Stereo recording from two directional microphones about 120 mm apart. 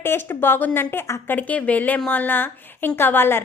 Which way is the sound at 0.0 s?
20° left (ahead or behind).